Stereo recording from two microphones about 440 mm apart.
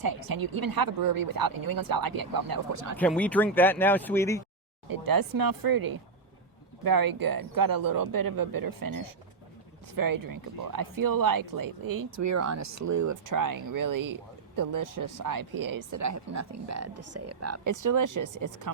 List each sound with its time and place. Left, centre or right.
0.0 s speech: right
3.0 s speech: centre
4.9 s speech: right